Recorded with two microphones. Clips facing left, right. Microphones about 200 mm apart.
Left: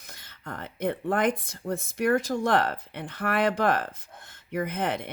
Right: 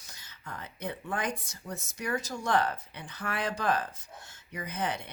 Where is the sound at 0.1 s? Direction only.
55° left (ahead or behind).